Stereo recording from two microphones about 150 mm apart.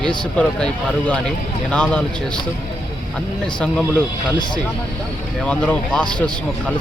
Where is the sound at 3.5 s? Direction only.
5° left (ahead or behind).